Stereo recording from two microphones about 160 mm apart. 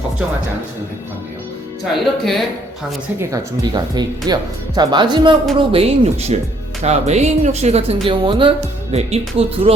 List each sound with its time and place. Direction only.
1.8 s speech: centre (ahead or behind)
3.2 s speech: 25° right (ahead or behind)